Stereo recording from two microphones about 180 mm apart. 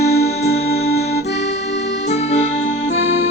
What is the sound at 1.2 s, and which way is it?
Accordion, 70° left (ahead or behind).